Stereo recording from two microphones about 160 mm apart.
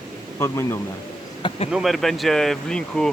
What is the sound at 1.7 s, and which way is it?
Speech, centre (ahead or behind).